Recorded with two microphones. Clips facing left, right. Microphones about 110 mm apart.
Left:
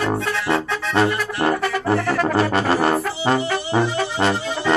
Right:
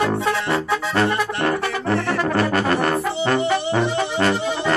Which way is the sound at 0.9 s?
15° left (ahead or behind).